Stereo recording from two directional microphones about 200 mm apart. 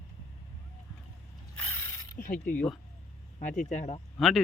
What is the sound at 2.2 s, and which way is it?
Speech, 40° left (ahead or behind).